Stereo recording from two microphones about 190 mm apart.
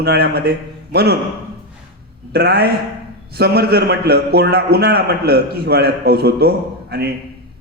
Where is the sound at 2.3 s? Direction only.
55° right (ahead or behind).